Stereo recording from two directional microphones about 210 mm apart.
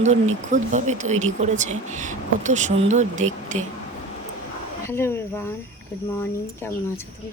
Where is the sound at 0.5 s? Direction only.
35° right (ahead or behind).